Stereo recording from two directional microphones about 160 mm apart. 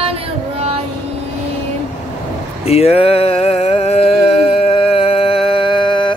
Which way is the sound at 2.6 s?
40° left (ahead or behind).